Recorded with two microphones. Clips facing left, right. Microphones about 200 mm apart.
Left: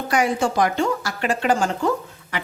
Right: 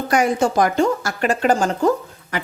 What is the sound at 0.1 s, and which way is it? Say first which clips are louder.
Speech: right 3 dB; 40° right (ahead or behind).